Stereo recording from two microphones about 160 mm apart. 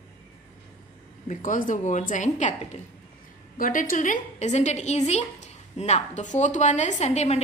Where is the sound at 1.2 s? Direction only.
55° left (ahead or behind).